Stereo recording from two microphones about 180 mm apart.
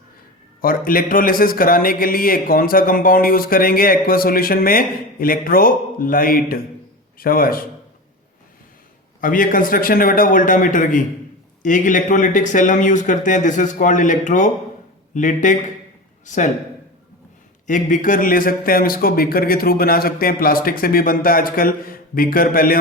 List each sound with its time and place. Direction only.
0.6 s a man's voice: 55° left (ahead or behind)
9.2 s a man's voice: 50° left (ahead or behind)
17.7 s a man's voice: 45° left (ahead or behind)